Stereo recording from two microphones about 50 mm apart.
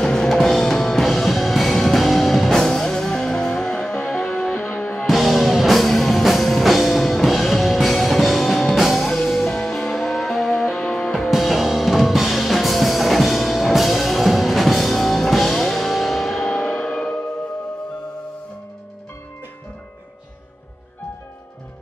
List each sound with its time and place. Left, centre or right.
0.0 s music: centre
5.0 s music: centre
11.1 s music: centre
16.4 s church bell: centre